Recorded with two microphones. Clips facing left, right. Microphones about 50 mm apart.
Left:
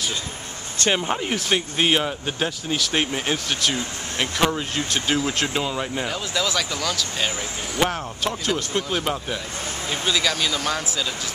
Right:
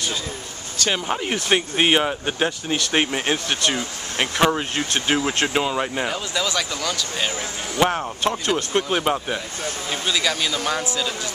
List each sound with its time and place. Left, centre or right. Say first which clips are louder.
0.8 s speech: left 2 dB; centre
1.1 s speech: right 2 dB; centre
9.8 s speech: even; centre